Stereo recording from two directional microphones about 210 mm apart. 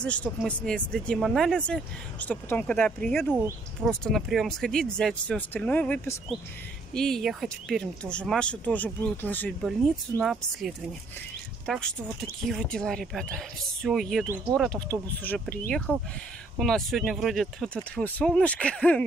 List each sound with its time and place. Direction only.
0.0 s speech: 5° left (ahead or behind)